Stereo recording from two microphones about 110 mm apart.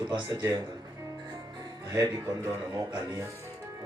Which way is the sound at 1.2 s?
35° right (ahead or behind).